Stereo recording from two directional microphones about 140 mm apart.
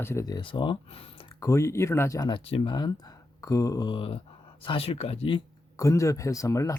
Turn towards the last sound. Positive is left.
turn(degrees=25)  # may be behind; listen again after turning